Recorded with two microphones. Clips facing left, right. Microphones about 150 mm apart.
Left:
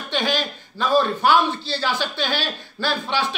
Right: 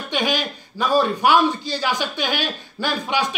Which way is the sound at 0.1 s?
15° right (ahead or behind).